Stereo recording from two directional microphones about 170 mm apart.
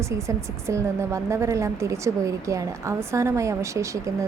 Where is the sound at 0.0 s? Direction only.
15° right (ahead or behind).